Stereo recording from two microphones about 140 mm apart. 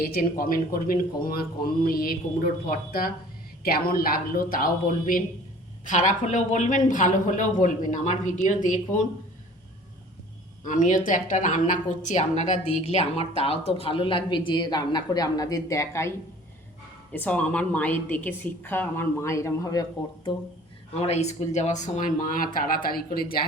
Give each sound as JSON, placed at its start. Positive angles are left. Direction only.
{"t": 0.0, "sound": "speech", "side_deg": 90}
{"t": 5.8, "sound": "speech", "side_deg": 65}
{"t": 10.6, "sound": "a woman's voice", "side_deg": 65}
{"t": 17.1, "sound": "a woman's voice", "side_deg": 10}
{"t": 21.0, "sound": "speech", "side_deg": 50}